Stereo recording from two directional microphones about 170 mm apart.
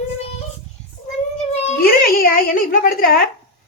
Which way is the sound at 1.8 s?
60° left (ahead or behind).